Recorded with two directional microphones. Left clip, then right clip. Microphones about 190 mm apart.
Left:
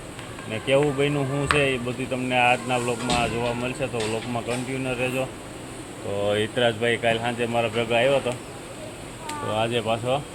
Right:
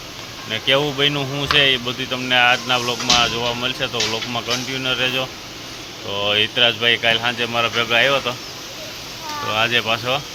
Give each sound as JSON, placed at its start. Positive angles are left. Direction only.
{"t": 0.8, "sound": "speech", "side_deg": 5}
{"t": 6.1, "sound": "speech", "side_deg": 20}
{"t": 9.6, "sound": "speech", "side_deg": 15}